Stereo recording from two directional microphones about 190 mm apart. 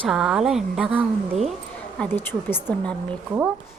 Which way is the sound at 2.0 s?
10° left (ahead or behind).